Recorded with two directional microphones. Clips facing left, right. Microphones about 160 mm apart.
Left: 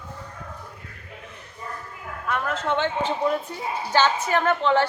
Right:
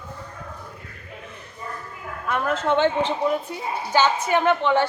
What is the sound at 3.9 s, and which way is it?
Speech, 15° right (ahead or behind).